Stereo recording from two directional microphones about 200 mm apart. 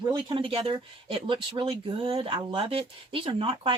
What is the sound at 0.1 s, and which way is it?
Speech, 25° right (ahead or behind).